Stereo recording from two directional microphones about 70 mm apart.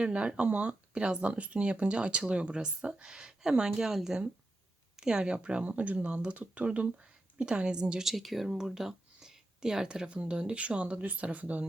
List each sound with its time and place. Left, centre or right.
0.0 s speech: centre